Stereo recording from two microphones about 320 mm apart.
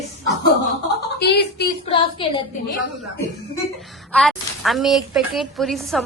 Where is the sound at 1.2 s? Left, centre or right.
Left.